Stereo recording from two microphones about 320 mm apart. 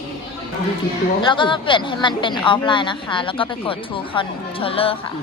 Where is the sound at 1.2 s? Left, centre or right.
Centre.